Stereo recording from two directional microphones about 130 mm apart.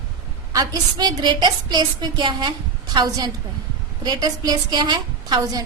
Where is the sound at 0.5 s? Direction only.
30° right (ahead or behind).